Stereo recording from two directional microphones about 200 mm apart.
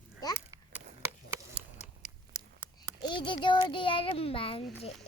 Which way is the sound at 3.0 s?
25° left (ahead or behind).